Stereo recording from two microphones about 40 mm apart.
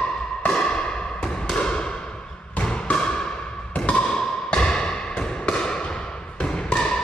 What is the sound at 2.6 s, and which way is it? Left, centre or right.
Bouncing, left.